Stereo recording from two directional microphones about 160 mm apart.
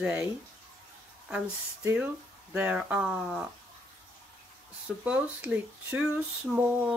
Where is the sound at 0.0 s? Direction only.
5° right (ahead or behind).